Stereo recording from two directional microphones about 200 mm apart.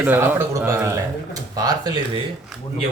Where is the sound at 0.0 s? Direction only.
10° right (ahead or behind).